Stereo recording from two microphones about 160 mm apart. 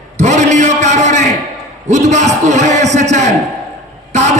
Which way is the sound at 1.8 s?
45° right (ahead or behind).